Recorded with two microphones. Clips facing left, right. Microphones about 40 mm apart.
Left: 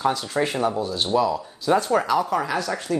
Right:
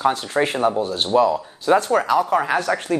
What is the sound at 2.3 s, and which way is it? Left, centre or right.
Speech, right.